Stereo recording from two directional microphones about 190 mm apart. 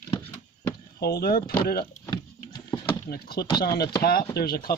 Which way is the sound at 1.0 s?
55° left (ahead or behind).